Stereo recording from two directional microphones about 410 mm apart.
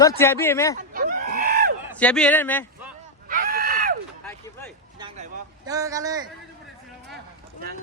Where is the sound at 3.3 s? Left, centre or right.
Right.